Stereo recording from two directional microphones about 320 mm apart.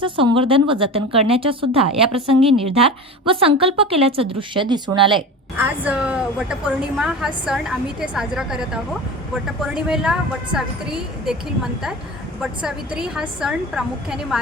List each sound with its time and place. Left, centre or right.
0.0 s a woman's voice: centre
5.5 s speech: centre